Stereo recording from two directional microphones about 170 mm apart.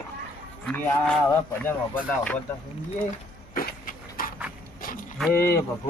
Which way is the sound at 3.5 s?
55° left (ahead or behind).